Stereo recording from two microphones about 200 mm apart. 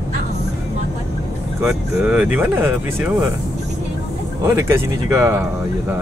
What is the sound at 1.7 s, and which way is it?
Speech, 5° right (ahead or behind).